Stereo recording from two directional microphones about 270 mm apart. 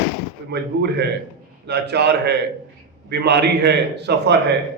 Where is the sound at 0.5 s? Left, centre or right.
Right.